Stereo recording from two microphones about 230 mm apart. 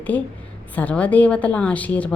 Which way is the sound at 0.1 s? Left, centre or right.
Centre.